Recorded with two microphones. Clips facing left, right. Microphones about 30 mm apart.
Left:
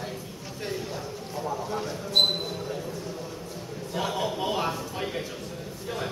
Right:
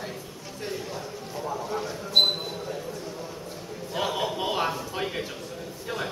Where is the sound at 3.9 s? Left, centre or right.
Centre.